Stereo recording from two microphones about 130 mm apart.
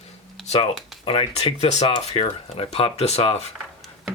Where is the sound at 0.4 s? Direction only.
50° left (ahead or behind).